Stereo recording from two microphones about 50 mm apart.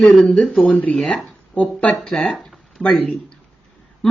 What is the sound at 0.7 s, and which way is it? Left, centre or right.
Speech, left.